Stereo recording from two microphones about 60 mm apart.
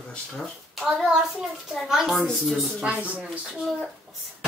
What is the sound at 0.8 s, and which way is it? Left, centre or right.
A child's voice, centre.